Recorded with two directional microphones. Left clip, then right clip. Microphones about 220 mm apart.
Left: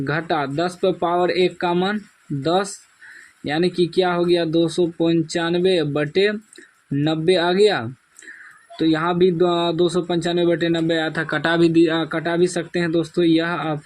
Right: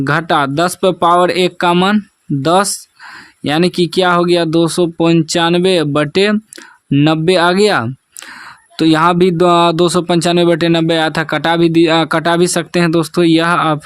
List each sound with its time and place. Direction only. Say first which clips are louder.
0.0 s speech: right 9 dB; 45° right (ahead or behind)